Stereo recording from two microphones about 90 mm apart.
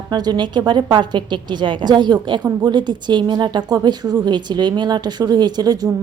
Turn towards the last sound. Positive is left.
turn(degrees=-50)  # may be behind; listen again after turning